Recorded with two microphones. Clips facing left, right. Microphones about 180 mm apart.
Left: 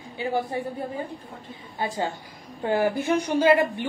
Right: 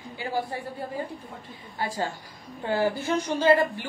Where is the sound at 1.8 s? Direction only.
20° left (ahead or behind).